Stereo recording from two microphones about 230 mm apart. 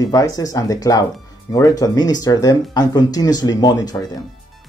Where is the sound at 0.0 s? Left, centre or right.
Centre.